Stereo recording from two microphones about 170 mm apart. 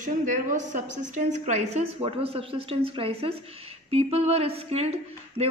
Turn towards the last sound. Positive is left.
turn(degrees=-40)  # may be behind; listen again after turning